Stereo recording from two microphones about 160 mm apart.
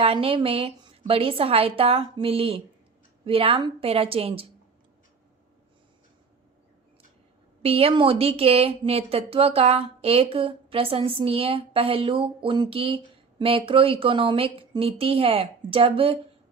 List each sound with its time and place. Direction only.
0.0 s a woman's voice: 35° right (ahead or behind)
7.6 s a woman's voice: 35° right (ahead or behind)